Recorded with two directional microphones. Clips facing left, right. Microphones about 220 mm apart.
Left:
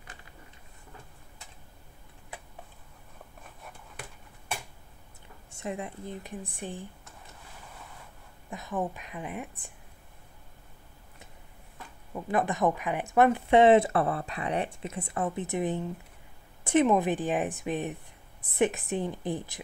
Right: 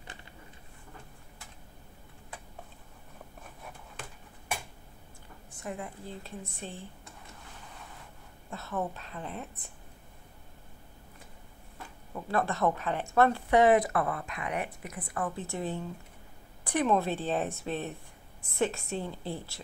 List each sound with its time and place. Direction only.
5.5 s a woman's voice: 25° left (ahead or behind)
8.5 s a woman's voice: 15° left (ahead or behind)
12.1 s a woman's voice: 15° left (ahead or behind)